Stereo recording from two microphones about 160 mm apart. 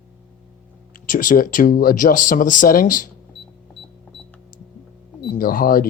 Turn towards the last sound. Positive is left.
turn(degrees=65)  # may be behind; listen again after turning